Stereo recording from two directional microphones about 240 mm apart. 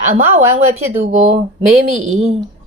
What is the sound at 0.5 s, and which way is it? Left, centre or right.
A woman's voice, right.